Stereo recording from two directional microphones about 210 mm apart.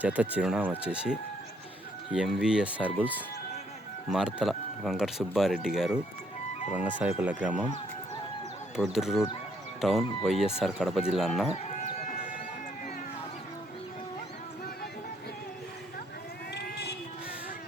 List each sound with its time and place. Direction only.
0.0 s speech: 5° right (ahead or behind)
4.4 s speech: centre (ahead or behind)
8.7 s speech: centre (ahead or behind)
16.6 s a sound: 50° left (ahead or behind)